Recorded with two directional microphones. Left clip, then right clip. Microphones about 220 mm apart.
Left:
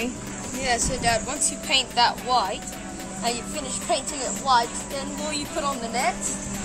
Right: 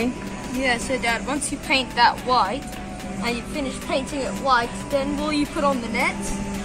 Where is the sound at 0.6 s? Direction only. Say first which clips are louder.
Right 2 dB; 50° left (ahead or behind).